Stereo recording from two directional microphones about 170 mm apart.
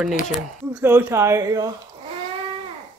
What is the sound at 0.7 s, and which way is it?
Speech, 10° right (ahead or behind).